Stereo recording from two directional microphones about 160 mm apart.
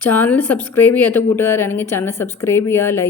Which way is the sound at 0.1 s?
10° left (ahead or behind).